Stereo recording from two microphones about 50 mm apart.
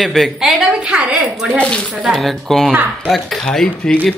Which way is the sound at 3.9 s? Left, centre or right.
Centre.